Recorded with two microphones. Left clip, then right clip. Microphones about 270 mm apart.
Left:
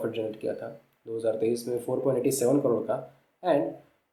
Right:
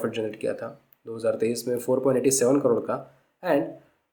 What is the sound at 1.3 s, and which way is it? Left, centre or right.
Speech, right.